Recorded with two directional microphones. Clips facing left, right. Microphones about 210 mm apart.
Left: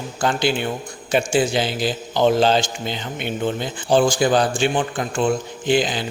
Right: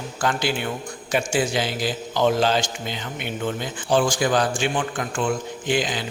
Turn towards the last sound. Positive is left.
turn(degrees=30)  # may be behind; listen again after turning